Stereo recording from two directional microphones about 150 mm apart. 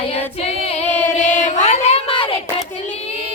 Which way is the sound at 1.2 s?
55° left (ahead or behind).